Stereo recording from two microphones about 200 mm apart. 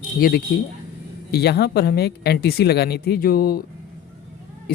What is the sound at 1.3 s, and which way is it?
Speech, 55° left (ahead or behind).